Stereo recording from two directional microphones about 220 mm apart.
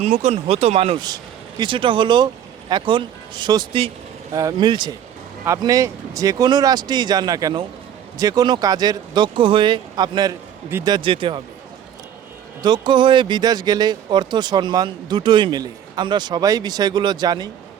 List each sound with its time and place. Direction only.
0.0 s speech: 30° right (ahead or behind)
12.6 s speech: 20° right (ahead or behind)